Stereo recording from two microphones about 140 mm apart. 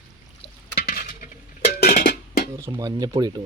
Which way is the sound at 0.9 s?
85° left.